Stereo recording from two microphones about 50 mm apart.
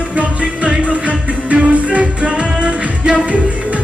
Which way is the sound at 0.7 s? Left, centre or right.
Right.